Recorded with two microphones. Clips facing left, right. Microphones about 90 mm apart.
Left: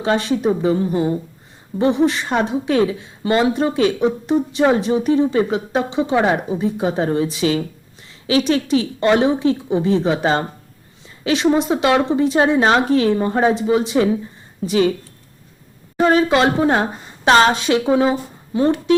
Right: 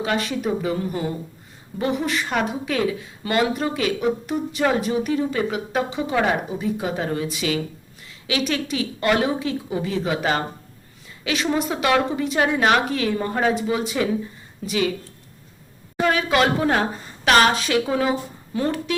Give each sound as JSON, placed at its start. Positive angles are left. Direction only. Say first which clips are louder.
{"t": 0.0, "sound": "a woman's voice", "louder": "left 6 dB", "side_deg": 30}
{"t": 16.0, "sound": "speech", "louder": "left 5 dB", "side_deg": 30}